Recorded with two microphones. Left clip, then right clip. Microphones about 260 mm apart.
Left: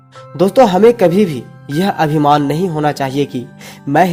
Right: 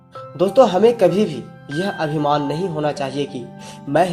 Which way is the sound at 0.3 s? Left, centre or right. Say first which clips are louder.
Left 4 dB; left.